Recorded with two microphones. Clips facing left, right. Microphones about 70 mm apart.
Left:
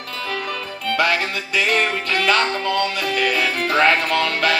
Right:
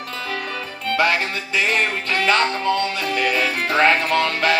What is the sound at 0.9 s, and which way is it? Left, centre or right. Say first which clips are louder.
Music: even; right.